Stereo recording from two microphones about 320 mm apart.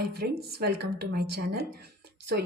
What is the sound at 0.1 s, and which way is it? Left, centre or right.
A woman's voice, right.